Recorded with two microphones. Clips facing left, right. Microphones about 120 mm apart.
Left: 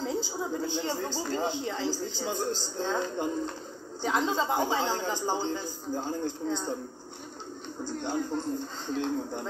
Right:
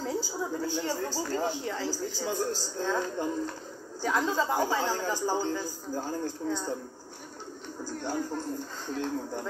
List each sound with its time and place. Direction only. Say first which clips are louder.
0.0 s a woman's voice: left 1 dB; 20° left (ahead or behind)
8.0 s a woman's voice: left 1 dB; 20° left (ahead or behind)